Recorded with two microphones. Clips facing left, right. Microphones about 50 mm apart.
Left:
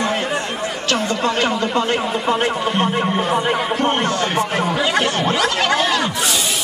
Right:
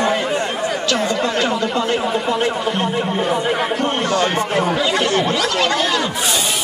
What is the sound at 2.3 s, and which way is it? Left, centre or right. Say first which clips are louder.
Speech: even; left.